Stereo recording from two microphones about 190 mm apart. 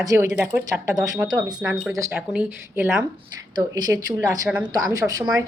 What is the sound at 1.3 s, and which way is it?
Speech, 20° right (ahead or behind).